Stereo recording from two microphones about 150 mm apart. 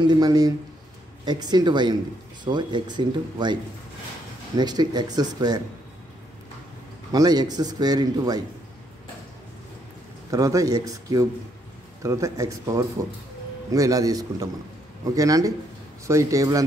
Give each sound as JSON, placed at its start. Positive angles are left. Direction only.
{"t": 0.0, "sound": "a man's voice", "side_deg": -25}
{"t": 4.6, "sound": "a man's voice", "side_deg": -30}
{"t": 7.1, "sound": "a man's voice", "side_deg": -25}
{"t": 10.3, "sound": "a man's voice", "side_deg": -25}